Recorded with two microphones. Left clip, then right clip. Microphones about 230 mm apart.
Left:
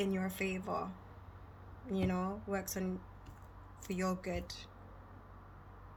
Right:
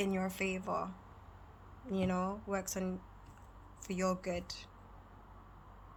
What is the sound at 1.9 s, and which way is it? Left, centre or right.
Speech, right.